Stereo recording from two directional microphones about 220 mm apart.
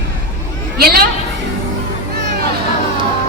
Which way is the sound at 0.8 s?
45° right (ahead or behind).